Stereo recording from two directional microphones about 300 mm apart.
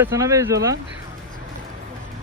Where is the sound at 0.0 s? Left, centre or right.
Centre.